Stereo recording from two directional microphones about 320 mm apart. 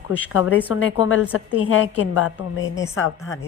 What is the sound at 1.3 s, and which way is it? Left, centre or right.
Speech, left.